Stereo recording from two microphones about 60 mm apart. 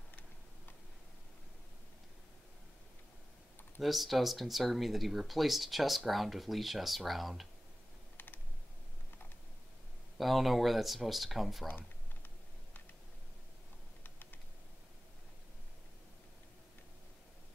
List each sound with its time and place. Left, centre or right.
3.8 s speech: centre
10.1 s speech: centre
11.6 s a sound: left